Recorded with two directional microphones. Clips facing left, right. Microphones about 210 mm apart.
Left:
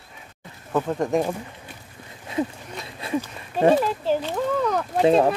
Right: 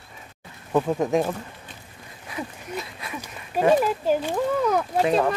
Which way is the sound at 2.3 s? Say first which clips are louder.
Left 5 dB; 25° left (ahead or behind).